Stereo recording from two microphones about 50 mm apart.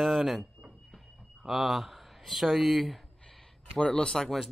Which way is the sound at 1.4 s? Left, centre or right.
Centre.